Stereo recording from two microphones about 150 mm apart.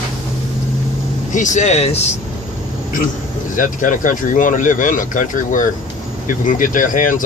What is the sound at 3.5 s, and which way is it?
Speech, 60° left (ahead or behind).